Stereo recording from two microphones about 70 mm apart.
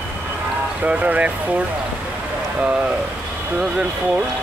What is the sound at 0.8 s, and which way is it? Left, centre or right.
Speech, right.